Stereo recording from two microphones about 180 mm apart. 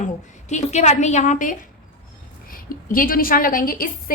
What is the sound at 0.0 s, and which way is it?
A woman's voice, 40° left (ahead or behind).